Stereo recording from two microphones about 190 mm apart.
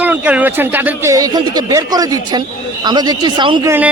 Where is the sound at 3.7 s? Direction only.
10° right (ahead or behind).